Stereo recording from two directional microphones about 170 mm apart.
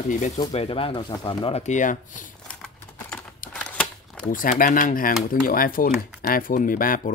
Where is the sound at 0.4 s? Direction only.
30° left (ahead or behind).